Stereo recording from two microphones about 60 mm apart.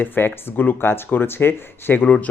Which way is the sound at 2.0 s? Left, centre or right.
Centre.